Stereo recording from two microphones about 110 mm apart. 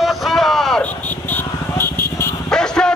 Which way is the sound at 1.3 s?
20° left (ahead or behind).